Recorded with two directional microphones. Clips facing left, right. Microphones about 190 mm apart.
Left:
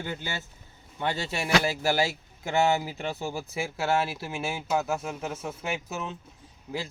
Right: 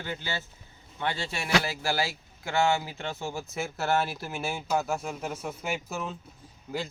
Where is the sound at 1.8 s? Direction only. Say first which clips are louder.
Left 4 dB; 25° left (ahead or behind).